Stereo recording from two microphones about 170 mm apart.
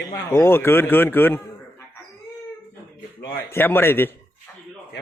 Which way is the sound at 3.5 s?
15° left (ahead or behind).